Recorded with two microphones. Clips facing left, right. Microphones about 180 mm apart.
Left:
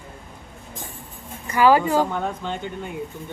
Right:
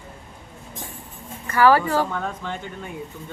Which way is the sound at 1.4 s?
15° left (ahead or behind).